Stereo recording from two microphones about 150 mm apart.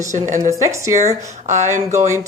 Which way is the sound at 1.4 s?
50° right (ahead or behind).